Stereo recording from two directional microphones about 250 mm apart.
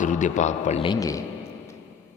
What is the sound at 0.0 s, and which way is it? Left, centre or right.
Speech, left.